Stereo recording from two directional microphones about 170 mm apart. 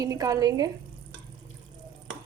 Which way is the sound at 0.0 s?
20° right (ahead or behind).